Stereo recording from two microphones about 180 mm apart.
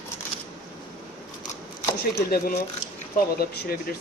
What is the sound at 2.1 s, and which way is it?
Speech, 60° left (ahead or behind).